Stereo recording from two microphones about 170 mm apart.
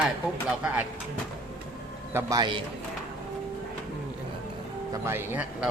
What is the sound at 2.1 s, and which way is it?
Speech, 25° right (ahead or behind).